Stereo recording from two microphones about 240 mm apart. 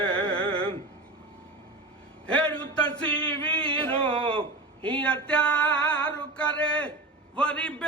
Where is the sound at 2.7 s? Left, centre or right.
Centre.